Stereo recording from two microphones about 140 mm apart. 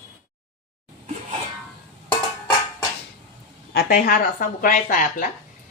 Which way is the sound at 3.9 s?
90° left.